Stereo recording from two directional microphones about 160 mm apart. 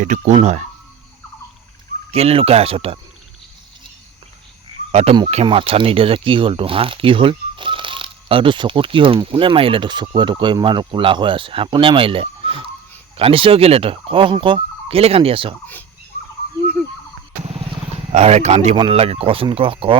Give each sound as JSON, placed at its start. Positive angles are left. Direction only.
{"t": 0.0, "sound": "speech", "side_deg": -50}
{"t": 2.1, "sound": "speech", "side_deg": -40}
{"t": 4.9, "sound": "speech", "side_deg": -40}
{"t": 16.1, "sound": "bird", "side_deg": -60}
{"t": 17.4, "sound": "vehicle", "side_deg": -40}
{"t": 18.1, "sound": "speech", "side_deg": -40}